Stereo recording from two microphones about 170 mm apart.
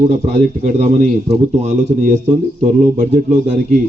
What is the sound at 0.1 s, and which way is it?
A man's voice, 45° right (ahead or behind).